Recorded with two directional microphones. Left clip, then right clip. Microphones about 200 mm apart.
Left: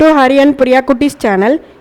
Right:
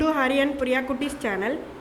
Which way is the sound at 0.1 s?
45° left (ahead or behind).